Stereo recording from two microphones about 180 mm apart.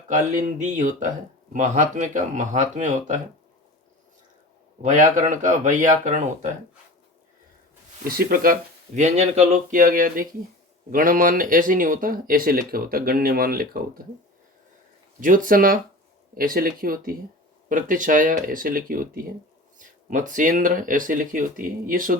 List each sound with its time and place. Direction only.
0.1 s speech: 45° right (ahead or behind)
4.8 s speech: 45° right (ahead or behind)
8.0 s speech: 55° right (ahead or behind)
9.0 s speech: 40° right (ahead or behind); by 13.8 s 55° right (ahead or behind)
15.2 s speech: 50° right (ahead or behind)